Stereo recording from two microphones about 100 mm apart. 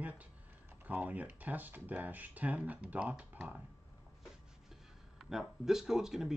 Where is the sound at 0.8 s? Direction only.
15° right (ahead or behind).